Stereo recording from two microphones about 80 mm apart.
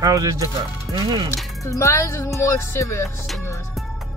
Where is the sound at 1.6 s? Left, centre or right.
Left.